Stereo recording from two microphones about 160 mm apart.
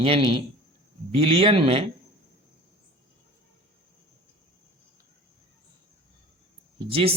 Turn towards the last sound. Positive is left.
turn(degrees=-35)  # may be behind; listen again after turning